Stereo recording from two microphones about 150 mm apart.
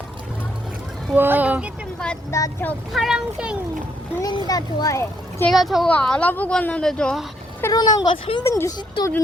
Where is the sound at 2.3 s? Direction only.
20° left (ahead or behind).